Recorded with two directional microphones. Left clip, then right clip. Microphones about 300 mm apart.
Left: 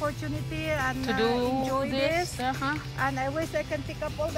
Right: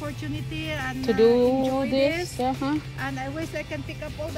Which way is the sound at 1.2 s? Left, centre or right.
Left.